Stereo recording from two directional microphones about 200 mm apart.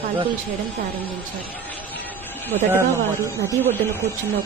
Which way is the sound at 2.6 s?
10° right (ahead or behind).